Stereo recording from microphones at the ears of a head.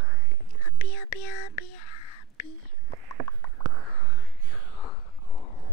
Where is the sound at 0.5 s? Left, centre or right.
Left.